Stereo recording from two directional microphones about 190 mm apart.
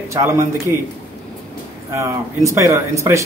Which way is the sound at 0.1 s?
15° right (ahead or behind).